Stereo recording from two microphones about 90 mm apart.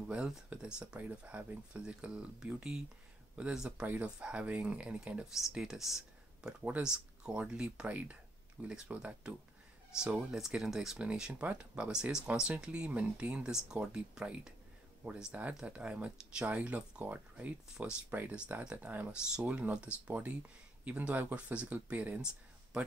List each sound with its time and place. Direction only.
0.1 s speech: 10° right (ahead or behind)
15.0 s speech: 25° right (ahead or behind)
15.6 s speech: 15° right (ahead or behind)